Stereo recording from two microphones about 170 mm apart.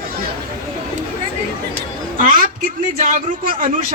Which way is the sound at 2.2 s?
55° right (ahead or behind).